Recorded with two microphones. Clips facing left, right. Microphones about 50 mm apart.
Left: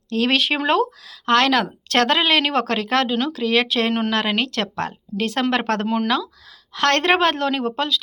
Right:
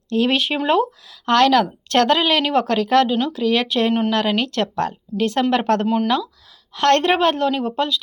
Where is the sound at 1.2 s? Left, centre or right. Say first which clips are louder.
Right 2 dB; left.